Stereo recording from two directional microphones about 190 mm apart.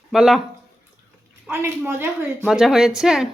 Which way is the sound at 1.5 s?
10° right (ahead or behind).